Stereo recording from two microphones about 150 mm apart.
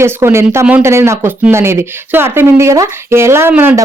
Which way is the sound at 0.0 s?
15° right (ahead or behind).